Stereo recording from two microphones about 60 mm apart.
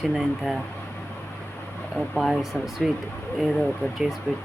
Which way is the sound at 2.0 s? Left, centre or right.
Centre.